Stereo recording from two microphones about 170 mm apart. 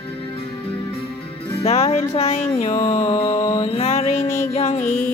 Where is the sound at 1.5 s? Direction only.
35° left (ahead or behind).